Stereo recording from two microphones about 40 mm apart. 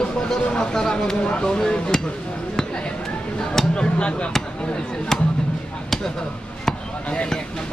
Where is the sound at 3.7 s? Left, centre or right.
Left.